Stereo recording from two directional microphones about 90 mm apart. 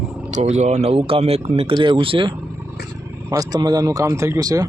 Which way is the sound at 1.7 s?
55° right (ahead or behind).